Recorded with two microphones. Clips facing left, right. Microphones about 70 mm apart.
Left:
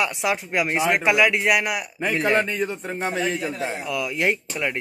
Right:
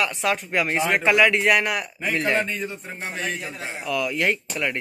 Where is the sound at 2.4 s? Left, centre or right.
Left.